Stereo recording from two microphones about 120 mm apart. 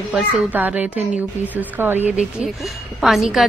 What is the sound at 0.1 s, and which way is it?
Speech, 15° right (ahead or behind).